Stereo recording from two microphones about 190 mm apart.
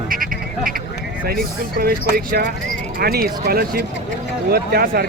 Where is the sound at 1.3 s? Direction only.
50° right (ahead or behind).